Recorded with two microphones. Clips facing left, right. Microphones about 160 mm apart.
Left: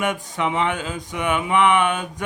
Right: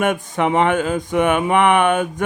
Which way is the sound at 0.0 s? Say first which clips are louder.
Right 5 dB; 50° right (ahead or behind).